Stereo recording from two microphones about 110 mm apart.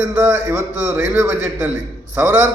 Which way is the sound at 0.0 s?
20° right (ahead or behind).